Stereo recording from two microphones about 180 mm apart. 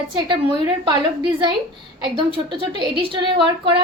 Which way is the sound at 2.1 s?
25° right (ahead or behind).